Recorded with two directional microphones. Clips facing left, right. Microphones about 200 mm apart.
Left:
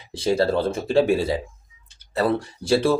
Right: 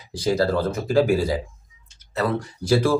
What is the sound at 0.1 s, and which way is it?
Speech, 25° left (ahead or behind).